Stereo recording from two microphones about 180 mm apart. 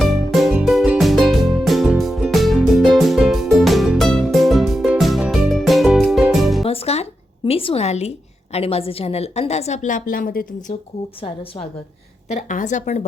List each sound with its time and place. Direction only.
0.0 s music: centre (ahead or behind)
6.7 s a sound: 35° left (ahead or behind)
8.5 s a woman's voice: 35° left (ahead or behind); by 10.8 s 50° left (ahead or behind)
12.3 s a woman's voice: 45° left (ahead or behind)